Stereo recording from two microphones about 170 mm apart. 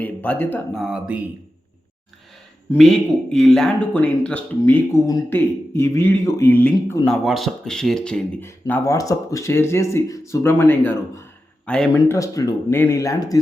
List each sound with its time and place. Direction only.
0.0 s speech: 10° left (ahead or behind)
0.8 s speech: 5° right (ahead or behind)
2.7 s speech: 5° left (ahead or behind)
12.1 s speech: 20° left (ahead or behind)